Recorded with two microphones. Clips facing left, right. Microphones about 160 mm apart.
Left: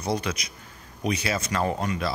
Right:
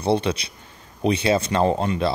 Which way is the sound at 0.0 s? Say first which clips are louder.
Right 7 dB; 30° right (ahead or behind).